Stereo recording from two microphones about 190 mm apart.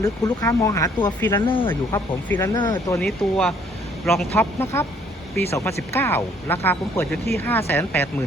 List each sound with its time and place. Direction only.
0.0 s speech: 20° left (ahead or behind)
1.5 s speech: 25° left (ahead or behind)
1.7 s speech: 10° left (ahead or behind)
3.0 s speech: 5° left (ahead or behind)